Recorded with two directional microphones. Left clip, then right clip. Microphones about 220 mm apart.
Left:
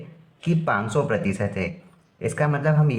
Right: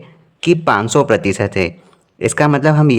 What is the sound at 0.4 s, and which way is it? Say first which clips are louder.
Speech: right 11 dB; 45° right (ahead or behind).